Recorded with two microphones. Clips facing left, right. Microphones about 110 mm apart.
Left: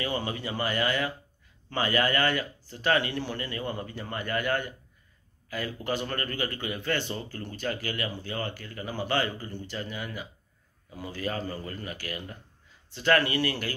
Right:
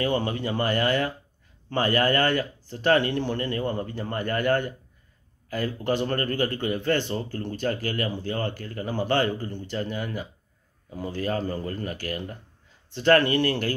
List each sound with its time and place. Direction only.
0.0 s speech: 45° right (ahead or behind)
5.9 s speech: 45° right (ahead or behind)